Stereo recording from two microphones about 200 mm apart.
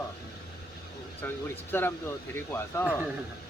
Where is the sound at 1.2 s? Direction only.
10° left (ahead or behind).